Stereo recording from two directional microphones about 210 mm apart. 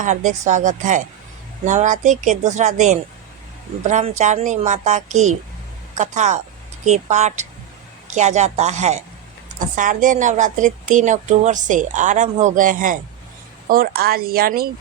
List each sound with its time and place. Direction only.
0.0 s a woman's voice: 35° right (ahead or behind)